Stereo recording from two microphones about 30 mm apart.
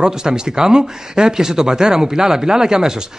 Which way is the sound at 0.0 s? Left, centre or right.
Right.